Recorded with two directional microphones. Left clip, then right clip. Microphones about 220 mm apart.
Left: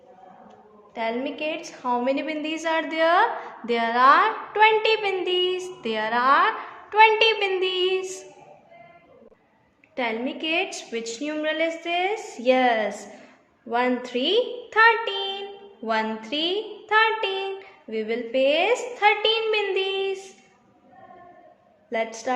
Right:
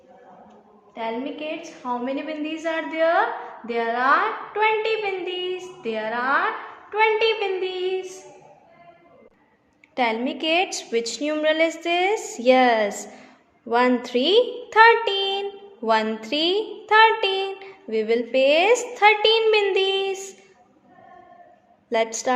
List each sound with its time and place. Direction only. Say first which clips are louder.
0.9 s a woman's voice: left 1 dB; 50° left (ahead or behind)
9.9 s a woman's voice: right 4 dB; 30° right (ahead or behind)
21.8 s a woman's voice: right 4 dB; 35° right (ahead or behind)